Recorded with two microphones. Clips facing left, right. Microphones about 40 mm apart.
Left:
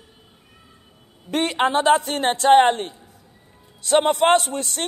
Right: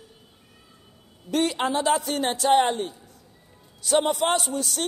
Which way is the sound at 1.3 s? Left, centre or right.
Left.